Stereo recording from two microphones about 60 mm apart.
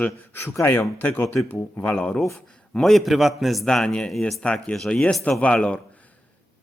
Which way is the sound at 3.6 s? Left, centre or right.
Centre.